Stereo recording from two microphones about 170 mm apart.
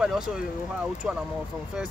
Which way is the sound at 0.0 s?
Centre (ahead or behind).